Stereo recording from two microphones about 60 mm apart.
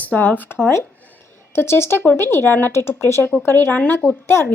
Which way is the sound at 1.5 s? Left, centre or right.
Left.